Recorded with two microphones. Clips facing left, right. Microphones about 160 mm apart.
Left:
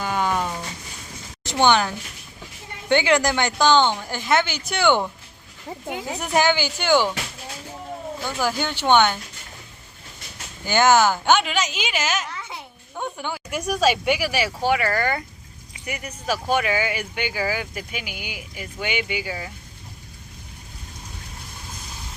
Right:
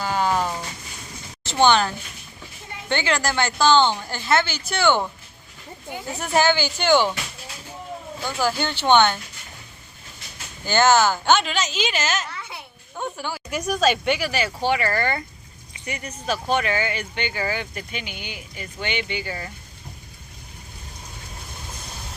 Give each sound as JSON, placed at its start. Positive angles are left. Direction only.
{"t": 0.0, "sound": "a sound", "side_deg": -30}
{"t": 1.5, "sound": "speech", "side_deg": 15}
{"t": 2.9, "sound": "speech", "side_deg": 15}
{"t": 5.9, "sound": "a woman's voice", "side_deg": 90}
{"t": 6.1, "sound": "speech", "side_deg": 15}
{"t": 8.4, "sound": "speech", "side_deg": 10}
{"t": 10.7, "sound": "speech", "side_deg": 10}
{"t": 12.3, "sound": "babbling", "side_deg": 20}
{"t": 13.0, "sound": "a woman's voice", "side_deg": 20}
{"t": 13.5, "sound": "speech", "side_deg": 5}